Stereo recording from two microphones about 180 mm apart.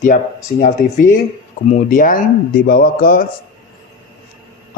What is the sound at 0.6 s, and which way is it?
Speech, 45° left (ahead or behind).